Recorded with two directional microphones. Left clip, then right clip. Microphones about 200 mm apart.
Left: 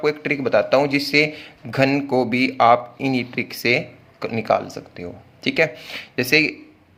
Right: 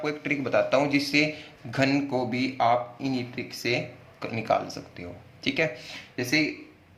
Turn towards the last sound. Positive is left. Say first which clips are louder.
# left 9 dB
turn(degrees=50)  # may be behind; listen again after turning